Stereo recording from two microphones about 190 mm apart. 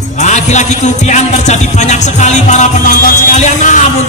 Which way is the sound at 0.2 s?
40° left (ahead or behind).